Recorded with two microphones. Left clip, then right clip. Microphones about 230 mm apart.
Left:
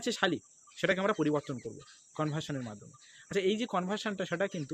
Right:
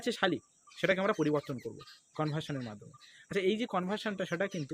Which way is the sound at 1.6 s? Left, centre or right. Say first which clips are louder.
Right 1 dB; right.